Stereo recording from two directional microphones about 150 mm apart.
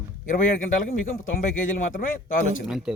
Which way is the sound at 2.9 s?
5° right (ahead or behind).